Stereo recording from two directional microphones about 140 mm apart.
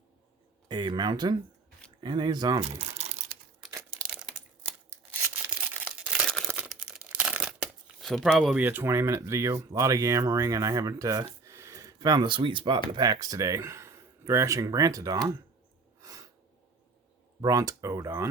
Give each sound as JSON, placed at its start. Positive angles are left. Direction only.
{"t": 0.7, "sound": "speech", "side_deg": -30}
{"t": 2.6, "sound": "crumpling", "side_deg": -50}
{"t": 5.2, "sound": "a sound", "side_deg": -10}
{"t": 6.7, "sound": "crumpling", "side_deg": -5}
{"t": 8.0, "sound": "speech", "side_deg": 0}
{"t": 8.5, "sound": "speech", "side_deg": -15}
{"t": 16.0, "sound": "a sound", "side_deg": -25}
{"t": 17.4, "sound": "speech", "side_deg": -25}